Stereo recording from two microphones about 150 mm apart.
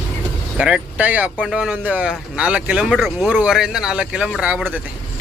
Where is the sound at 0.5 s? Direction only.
5° right (ahead or behind).